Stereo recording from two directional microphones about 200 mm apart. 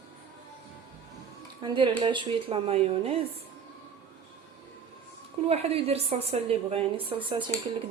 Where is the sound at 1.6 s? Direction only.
25° right (ahead or behind).